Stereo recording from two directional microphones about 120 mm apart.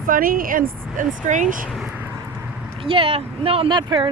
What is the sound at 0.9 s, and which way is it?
Speech, 90° right.